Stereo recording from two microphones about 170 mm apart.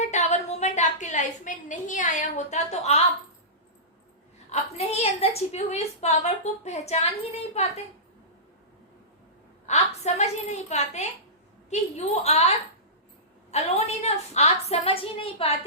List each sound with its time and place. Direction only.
0.0 s a sound: 45° left (ahead or behind)
4.4 s a woman's voice: 40° left (ahead or behind)
9.6 s a woman's voice: 40° left (ahead or behind)